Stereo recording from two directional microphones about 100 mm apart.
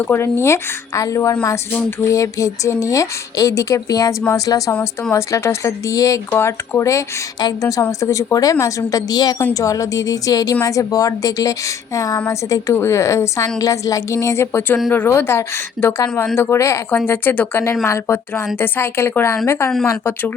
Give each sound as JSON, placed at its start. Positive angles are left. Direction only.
{"t": 0.0, "sound": "speech", "side_deg": 20}
{"t": 17.1, "sound": "speech", "side_deg": 20}